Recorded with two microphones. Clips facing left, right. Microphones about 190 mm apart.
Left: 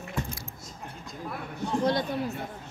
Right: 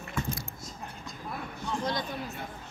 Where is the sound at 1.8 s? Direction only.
60° left (ahead or behind).